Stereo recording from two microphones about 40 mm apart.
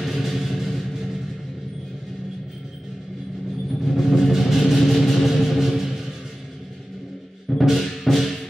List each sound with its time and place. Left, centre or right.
0.0 s music: centre
3.9 s music: centre
7.6 s music: centre